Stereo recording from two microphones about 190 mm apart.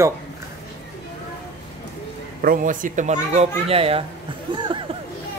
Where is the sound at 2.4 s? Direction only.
45° right (ahead or behind); by 4.6 s 25° right (ahead or behind).